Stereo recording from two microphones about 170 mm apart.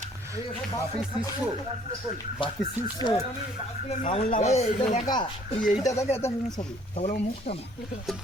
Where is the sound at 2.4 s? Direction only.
30° left (ahead or behind).